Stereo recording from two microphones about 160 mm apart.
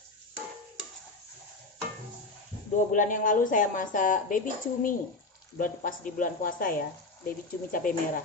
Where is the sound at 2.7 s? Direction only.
55° left (ahead or behind).